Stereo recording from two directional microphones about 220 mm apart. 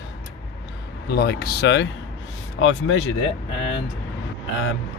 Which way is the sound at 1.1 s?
45° left (ahead or behind).